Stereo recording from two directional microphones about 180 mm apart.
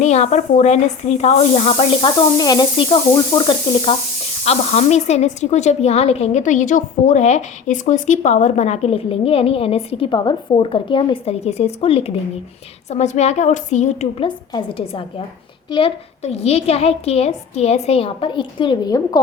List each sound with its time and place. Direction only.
0.0 s speech: 40° left (ahead or behind)
4.4 s speech: 35° left (ahead or behind)
14.3 s a woman's voice: 30° left (ahead or behind)